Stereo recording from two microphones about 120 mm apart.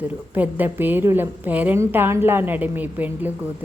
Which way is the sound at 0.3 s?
15° right (ahead or behind).